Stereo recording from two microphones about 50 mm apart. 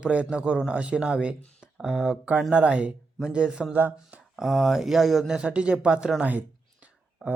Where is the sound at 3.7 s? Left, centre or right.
Right.